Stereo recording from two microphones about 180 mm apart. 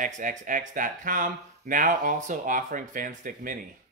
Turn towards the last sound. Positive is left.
turn(degrees=-50)  # may be behind; listen again after turning